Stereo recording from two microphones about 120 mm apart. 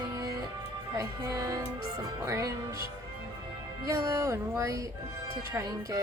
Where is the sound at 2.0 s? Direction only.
30° right (ahead or behind).